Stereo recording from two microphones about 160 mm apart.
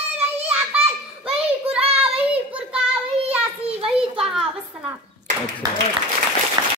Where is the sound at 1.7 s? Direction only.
35° right (ahead or behind).